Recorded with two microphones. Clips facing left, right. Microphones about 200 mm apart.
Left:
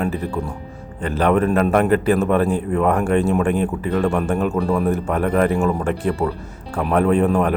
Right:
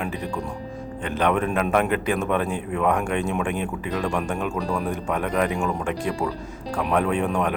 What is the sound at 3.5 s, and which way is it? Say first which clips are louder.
Speech: left 7 dB; 45° left (ahead or behind).